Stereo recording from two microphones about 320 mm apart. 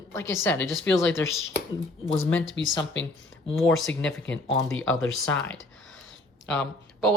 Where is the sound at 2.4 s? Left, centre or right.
Left.